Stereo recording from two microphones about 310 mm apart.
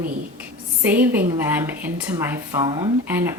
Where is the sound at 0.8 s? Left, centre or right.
Centre.